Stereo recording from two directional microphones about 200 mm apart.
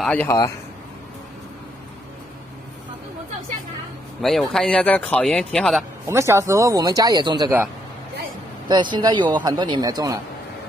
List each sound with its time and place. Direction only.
0.0 s speech: 10° left (ahead or behind)
4.2 s speech: centre (ahead or behind)
6.0 s speech: 15° right (ahead or behind)
8.6 s a man's voice: 25° right (ahead or behind)